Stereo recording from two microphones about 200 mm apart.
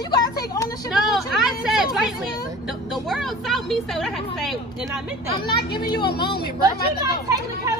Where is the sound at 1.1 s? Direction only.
Centre (ahead or behind).